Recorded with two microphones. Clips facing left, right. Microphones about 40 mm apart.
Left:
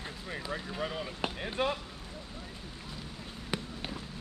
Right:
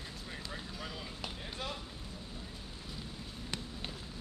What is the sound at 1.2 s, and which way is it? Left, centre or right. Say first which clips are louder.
Speech: left 12 dB; left.